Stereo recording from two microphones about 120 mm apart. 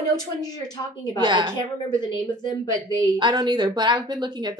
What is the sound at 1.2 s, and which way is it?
Speech, 40° right (ahead or behind).